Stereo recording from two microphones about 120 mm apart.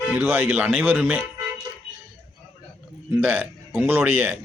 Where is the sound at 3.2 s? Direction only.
15° right (ahead or behind).